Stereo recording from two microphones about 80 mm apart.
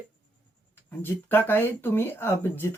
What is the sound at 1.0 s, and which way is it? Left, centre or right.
Speech, left.